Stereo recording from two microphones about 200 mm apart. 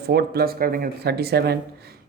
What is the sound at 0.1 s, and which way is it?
Speech, 50° right (ahead or behind).